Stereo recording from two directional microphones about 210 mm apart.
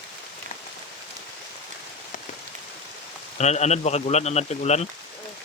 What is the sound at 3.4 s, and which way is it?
A man's voice, 30° left (ahead or behind).